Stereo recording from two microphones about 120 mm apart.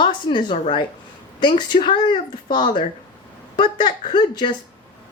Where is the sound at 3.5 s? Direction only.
40° left (ahead or behind).